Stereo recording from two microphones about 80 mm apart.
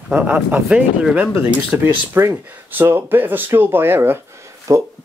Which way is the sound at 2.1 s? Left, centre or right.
Right.